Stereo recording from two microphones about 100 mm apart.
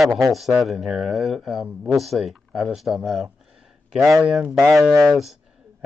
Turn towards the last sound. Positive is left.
turn(degrees=5)  # may be behind; listen again after turning